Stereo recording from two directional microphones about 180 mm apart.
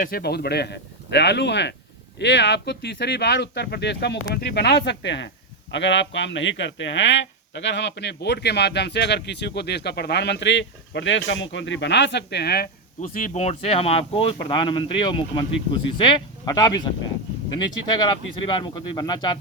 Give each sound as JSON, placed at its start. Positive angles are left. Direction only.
{"t": 0.0, "sound": "a man's voice", "side_deg": 60}
{"t": 18.0, "sound": "speech", "side_deg": 25}